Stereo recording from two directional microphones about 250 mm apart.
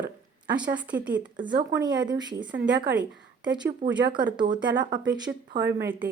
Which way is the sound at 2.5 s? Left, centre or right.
Right.